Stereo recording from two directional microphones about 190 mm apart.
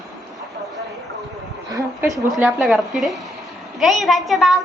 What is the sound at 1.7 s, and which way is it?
Speech, 20° right (ahead or behind).